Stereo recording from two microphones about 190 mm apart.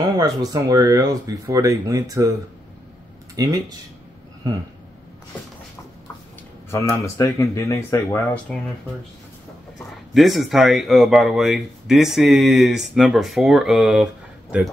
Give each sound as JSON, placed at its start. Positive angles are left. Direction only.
{"t": 0.2, "sound": "speech", "side_deg": -20}
{"t": 3.3, "sound": "speech", "side_deg": -20}
{"t": 6.7, "sound": "speech", "side_deg": 15}
{"t": 10.1, "sound": "speech", "side_deg": 0}